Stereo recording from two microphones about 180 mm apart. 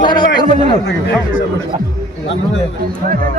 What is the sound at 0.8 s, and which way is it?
Speech, 90° left.